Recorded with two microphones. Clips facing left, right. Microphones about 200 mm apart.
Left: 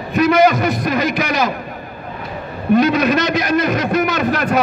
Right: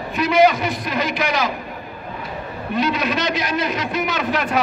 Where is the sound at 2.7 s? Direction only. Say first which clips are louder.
Left 8 dB; 45° left (ahead or behind).